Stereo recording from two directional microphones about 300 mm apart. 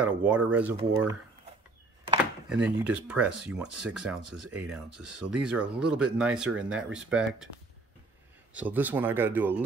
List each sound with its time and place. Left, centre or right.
0.0 s speech: centre
2.5 s speech: centre
8.5 s speech: centre